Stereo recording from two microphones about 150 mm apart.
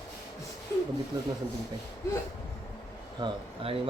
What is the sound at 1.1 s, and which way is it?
Speech, 25° right (ahead or behind).